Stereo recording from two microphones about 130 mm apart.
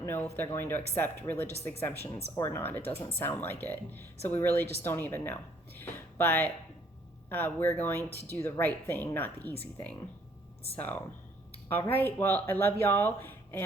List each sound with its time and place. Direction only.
0.0 s a woman's voice: 20° left (ahead or behind)
10.8 s a woman's voice: 10° left (ahead or behind)